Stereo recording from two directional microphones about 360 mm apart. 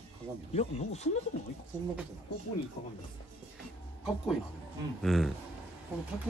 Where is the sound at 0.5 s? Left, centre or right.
Centre.